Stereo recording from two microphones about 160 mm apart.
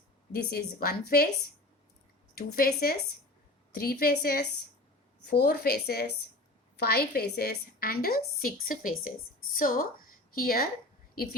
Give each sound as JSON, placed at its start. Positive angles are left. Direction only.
{"t": 0.3, "sound": "a woman's voice", "side_deg": 70}
{"t": 2.3, "sound": "a woman's voice", "side_deg": 70}